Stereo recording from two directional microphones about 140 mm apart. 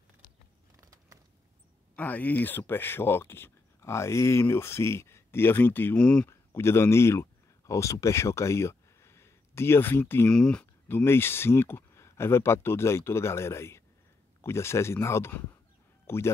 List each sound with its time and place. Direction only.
0.8 s biting: 25° right (ahead or behind)
2.0 s speech: 10° left (ahead or behind)
6.5 s speech: 20° left (ahead or behind)